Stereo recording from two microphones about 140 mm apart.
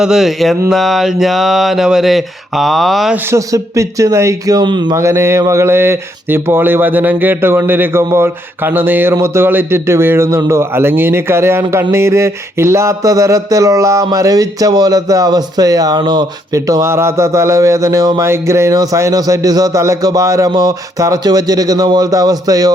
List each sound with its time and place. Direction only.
0.0 s speech: 5° right (ahead or behind)
3.2 s speech: 20° right (ahead or behind)
4.9 s speech: 20° right (ahead or behind)